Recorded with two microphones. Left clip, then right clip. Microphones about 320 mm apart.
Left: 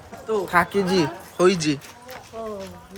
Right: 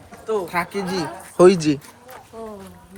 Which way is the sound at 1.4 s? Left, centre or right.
Centre.